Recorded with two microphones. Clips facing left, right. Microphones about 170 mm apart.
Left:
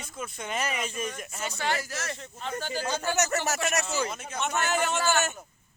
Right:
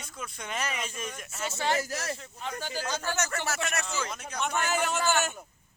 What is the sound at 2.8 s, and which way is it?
Speech, 10° left (ahead or behind).